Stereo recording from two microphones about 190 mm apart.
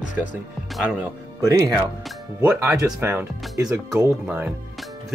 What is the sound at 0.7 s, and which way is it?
Speech, 5° right (ahead or behind).